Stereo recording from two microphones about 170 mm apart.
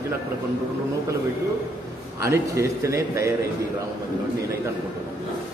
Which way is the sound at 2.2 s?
15° right (ahead or behind).